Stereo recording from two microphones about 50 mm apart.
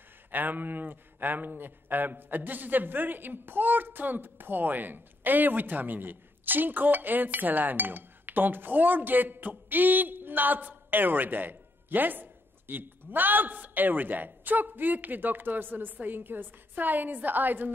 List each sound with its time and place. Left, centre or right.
0.3 s a man's voice: right